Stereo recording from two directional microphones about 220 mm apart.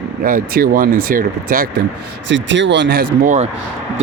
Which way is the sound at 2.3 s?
55° right (ahead or behind).